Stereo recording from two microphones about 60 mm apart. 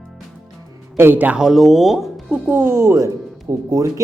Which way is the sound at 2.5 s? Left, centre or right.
Right.